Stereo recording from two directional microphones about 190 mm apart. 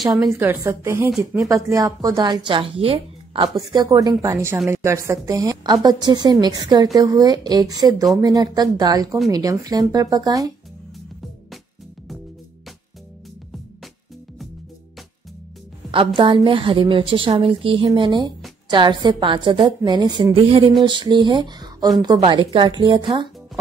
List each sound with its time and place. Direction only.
0.0 s speech: centre (ahead or behind)
0.4 s a woman's voice: 15° right (ahead or behind)
1.1 s speech: centre (ahead or behind)
1.5 s a woman's voice: 15° right (ahead or behind)
15.9 s a woman's voice: 25° right (ahead or behind)